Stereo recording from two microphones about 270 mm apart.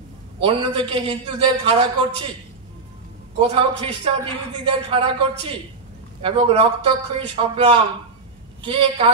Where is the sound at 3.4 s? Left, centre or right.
Centre.